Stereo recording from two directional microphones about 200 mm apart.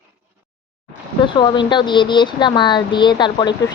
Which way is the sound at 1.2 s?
25° left (ahead or behind).